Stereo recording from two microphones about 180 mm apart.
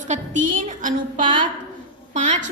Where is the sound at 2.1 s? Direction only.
40° right (ahead or behind).